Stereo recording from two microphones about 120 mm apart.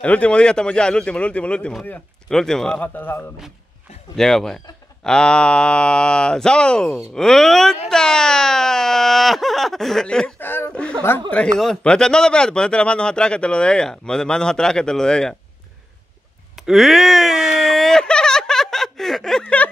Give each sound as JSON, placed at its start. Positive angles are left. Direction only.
{"t": 0.0, "sound": "speech", "side_deg": 10}
{"t": 2.9, "sound": "speech", "side_deg": 15}
{"t": 4.2, "sound": "speech", "side_deg": 5}
{"t": 16.6, "sound": "speech", "side_deg": 0}